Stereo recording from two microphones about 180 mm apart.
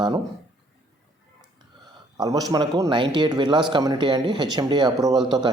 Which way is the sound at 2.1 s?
20° right (ahead or behind).